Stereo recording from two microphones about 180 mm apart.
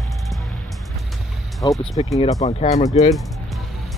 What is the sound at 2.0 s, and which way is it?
Speech, 30° left (ahead or behind).